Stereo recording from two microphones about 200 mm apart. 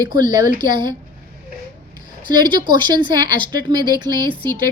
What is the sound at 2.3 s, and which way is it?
Speech, 20° right (ahead or behind).